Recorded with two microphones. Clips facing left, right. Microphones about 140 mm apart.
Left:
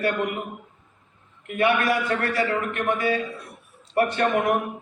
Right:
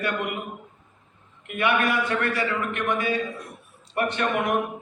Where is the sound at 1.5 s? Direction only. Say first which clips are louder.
Left 2 dB; 40° left (ahead or behind).